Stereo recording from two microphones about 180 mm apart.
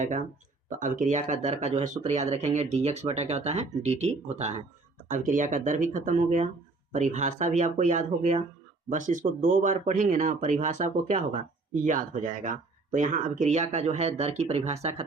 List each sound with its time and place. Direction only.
0.0 s speech: 45° right (ahead or behind)